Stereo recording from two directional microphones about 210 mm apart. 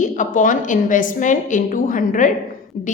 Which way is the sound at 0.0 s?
35° left (ahead or behind).